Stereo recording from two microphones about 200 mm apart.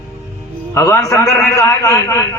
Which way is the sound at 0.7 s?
15° left (ahead or behind).